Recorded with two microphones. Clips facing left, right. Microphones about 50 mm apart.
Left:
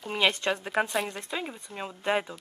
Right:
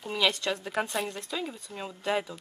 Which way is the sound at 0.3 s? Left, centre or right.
Left.